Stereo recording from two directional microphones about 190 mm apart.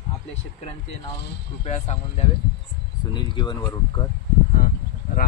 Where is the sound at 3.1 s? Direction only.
25° left (ahead or behind).